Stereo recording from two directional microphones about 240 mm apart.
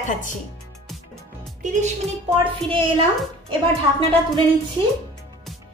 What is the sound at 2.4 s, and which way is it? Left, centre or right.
Speech, right.